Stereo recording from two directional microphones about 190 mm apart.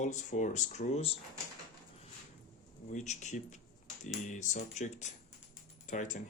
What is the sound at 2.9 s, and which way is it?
Speech, 40° left (ahead or behind).